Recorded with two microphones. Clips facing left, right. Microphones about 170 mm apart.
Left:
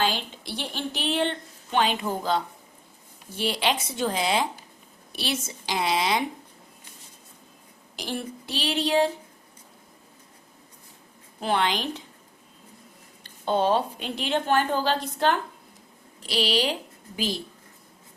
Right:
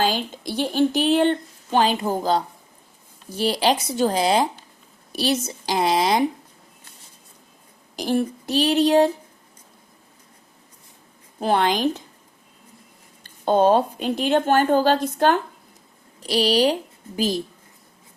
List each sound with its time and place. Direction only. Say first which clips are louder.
0.0 s speech: right 4 dB; 40° right (ahead or behind)
7.9 s a woman's voice: right 10 dB; 45° right (ahead or behind)
11.3 s a woman's voice: right 5 dB; 45° right (ahead or behind)
13.2 s a woman's voice: right 6 dB; 45° right (ahead or behind)